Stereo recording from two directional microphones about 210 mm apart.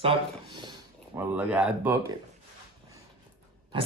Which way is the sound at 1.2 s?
5° right (ahead or behind).